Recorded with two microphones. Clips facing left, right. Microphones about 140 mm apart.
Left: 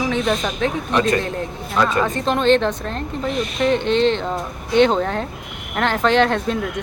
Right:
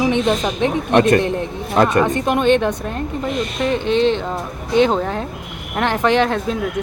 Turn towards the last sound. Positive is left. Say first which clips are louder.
# even
turn(degrees=-5)  # may be behind; listen again after turning